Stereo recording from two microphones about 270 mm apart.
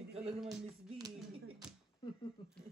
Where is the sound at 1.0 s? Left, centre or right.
Centre.